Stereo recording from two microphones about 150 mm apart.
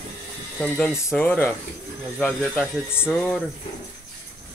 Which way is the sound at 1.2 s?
10° left (ahead or behind).